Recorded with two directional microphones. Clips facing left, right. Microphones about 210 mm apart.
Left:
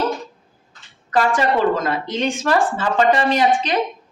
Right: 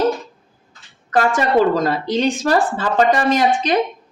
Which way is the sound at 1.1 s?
45° right (ahead or behind).